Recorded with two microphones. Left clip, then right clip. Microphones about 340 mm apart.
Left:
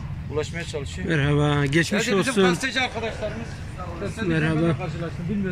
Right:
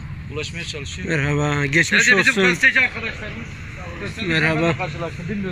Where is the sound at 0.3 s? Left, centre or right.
Left.